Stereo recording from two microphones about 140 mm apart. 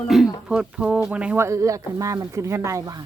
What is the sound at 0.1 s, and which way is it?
Speech, 5° right (ahead or behind).